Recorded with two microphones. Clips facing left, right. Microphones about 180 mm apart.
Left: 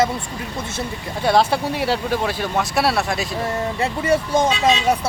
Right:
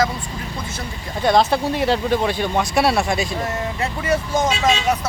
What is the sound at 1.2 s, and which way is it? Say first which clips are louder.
Speech: right 1 dB; 10° left (ahead or behind).